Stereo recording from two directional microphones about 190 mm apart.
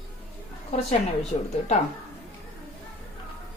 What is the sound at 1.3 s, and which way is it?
Speech, 30° left (ahead or behind).